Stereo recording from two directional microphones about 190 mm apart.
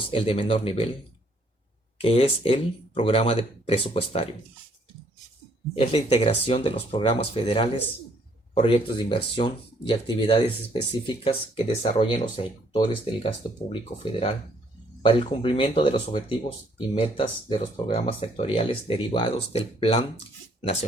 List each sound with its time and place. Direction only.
0.1 s speech: 30° left (ahead or behind)
2.0 s speech: 30° left (ahead or behind)
5.7 s speech: 30° left (ahead or behind)